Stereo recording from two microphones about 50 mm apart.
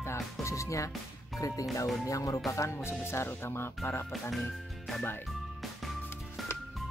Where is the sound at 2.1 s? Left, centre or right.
Left.